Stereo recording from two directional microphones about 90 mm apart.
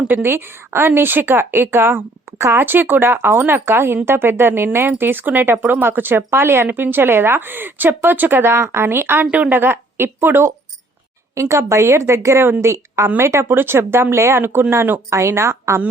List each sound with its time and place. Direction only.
0.1 s a woman's voice: 25° right (ahead or behind)